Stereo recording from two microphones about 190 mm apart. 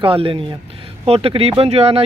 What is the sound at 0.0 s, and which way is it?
Speech, 30° right (ahead or behind).